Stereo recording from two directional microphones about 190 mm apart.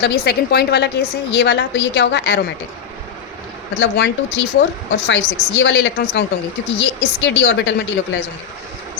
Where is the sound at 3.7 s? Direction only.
70° left (ahead or behind).